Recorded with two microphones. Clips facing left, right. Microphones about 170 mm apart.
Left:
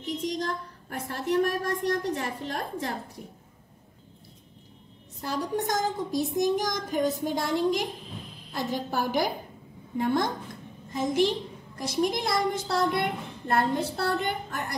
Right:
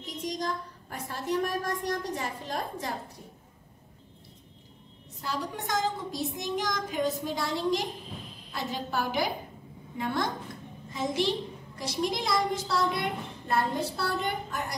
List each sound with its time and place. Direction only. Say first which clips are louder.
0.0 s a woman's voice: left 3 dB; 60° left (ahead or behind)
5.2 s speech: left 5 dB; 50° left (ahead or behind)
10.9 s a woman's voice: left 4 dB; 50° left (ahead or behind)